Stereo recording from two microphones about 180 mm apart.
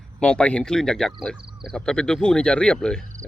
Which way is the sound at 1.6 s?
5° left (ahead or behind).